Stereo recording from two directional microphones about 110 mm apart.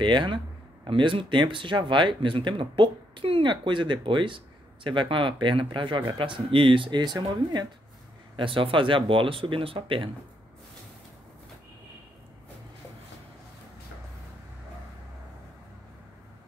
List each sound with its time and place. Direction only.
0.0 s speech: 45° right (ahead or behind)
8.4 s speech: 50° right (ahead or behind)